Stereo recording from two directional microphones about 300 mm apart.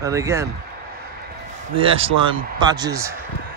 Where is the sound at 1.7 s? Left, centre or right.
Centre.